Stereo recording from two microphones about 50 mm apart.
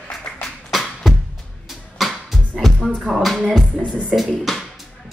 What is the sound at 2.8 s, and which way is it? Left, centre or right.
Music, centre.